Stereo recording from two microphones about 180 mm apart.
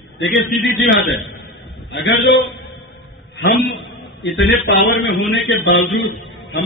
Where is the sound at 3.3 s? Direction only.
70° left (ahead or behind).